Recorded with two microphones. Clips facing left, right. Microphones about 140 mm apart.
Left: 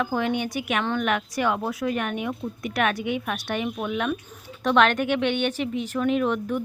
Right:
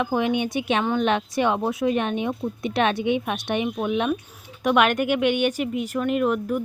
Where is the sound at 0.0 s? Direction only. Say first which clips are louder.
Right 2 dB; 20° right (ahead or behind).